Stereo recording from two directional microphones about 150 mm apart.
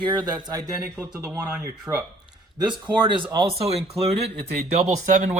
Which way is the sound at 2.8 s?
30° right (ahead or behind).